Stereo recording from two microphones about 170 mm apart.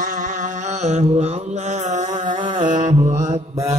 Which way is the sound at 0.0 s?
50° right (ahead or behind).